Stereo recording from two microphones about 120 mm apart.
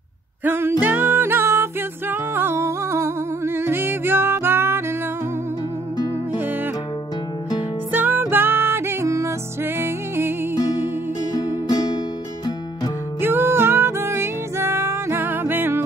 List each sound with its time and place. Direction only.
0.4 s music: 20° right (ahead or behind)
6.3 s music: 15° right (ahead or behind)
7.9 s music: 15° right (ahead or behind)
11.3 s music: 35° left (ahead or behind)
13.2 s music: 20° right (ahead or behind)